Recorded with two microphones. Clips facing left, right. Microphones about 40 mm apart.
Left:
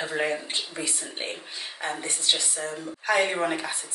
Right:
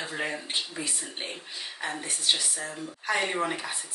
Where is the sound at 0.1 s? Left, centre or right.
Centre.